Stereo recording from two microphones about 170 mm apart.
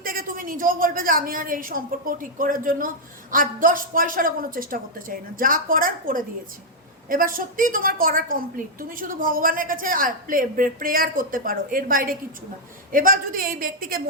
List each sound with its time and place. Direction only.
0.0 s a woman's voice: 55° right (ahead or behind)